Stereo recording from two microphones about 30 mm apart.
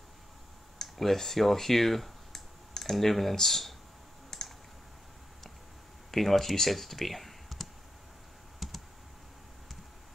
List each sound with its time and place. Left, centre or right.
0.8 s speech: centre
4.3 s typing: centre
6.1 s speech: centre
8.6 s computer keyboard: centre